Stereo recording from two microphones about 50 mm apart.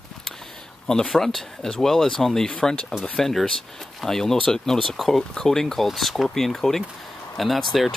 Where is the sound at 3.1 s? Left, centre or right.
Centre.